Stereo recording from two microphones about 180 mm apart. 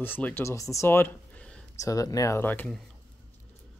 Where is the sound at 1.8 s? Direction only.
20° left (ahead or behind).